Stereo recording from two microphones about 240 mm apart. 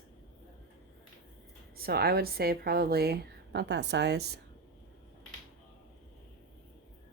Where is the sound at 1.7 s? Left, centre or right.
Right.